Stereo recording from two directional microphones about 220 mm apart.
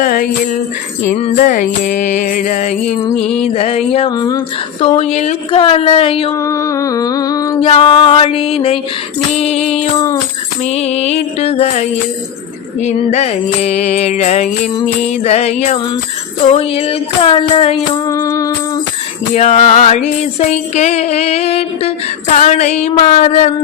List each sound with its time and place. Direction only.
0.0 s music: 40° left (ahead or behind)
1.0 s music: 25° left (ahead or behind)
4.9 s music: 30° left (ahead or behind)
6.3 s a sound: 15° left (ahead or behind)
7.7 s music: 25° left (ahead or behind)
18.0 s music: 15° left (ahead or behind)
19.3 s music: 30° left (ahead or behind)